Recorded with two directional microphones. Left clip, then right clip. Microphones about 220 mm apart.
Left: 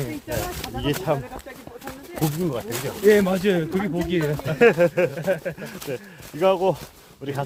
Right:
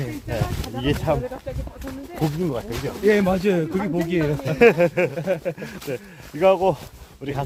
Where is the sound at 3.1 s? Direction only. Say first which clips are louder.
Left 1 dB; 15° right (ahead or behind).